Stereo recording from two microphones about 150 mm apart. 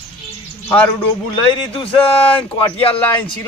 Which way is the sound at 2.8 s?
40° left (ahead or behind).